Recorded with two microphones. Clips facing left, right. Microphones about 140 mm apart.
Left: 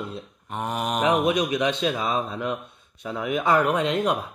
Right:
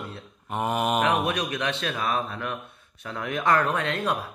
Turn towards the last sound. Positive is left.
turn(degrees=15)  # may be behind; listen again after turning